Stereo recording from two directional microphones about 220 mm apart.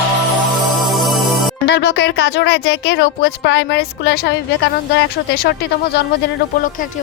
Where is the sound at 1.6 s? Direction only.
50° left (ahead or behind).